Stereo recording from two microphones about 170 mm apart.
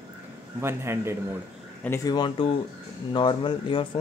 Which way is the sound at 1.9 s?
25° left (ahead or behind).